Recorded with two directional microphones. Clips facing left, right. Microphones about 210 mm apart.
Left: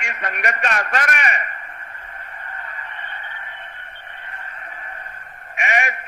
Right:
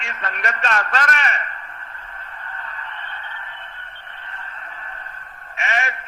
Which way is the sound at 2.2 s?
15° left (ahead or behind).